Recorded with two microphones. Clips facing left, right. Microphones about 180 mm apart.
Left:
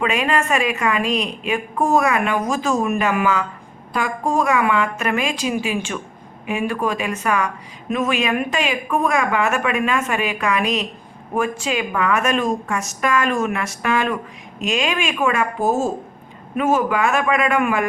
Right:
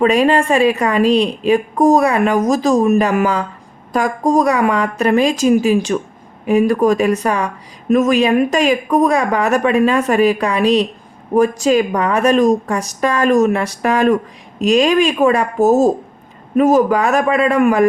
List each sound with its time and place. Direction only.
0.0 s a woman's voice: 35° right (ahead or behind)